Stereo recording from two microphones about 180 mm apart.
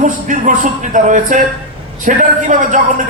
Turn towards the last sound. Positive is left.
turn(degrees=-45)  # may be behind; listen again after turning